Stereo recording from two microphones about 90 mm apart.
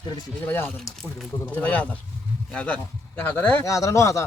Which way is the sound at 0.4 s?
25° left (ahead or behind).